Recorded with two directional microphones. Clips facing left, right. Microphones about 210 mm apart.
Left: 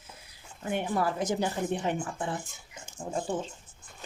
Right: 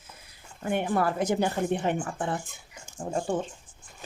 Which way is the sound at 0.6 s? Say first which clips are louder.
Right 3 dB; 60° right (ahead or behind).